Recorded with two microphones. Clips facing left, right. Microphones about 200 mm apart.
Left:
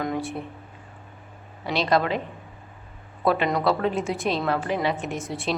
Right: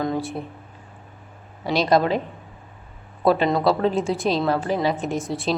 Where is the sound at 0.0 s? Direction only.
30° right (ahead or behind).